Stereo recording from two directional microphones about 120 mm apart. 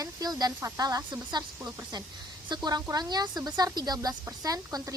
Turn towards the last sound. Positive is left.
turn(degrees=-30)  # may be behind; listen again after turning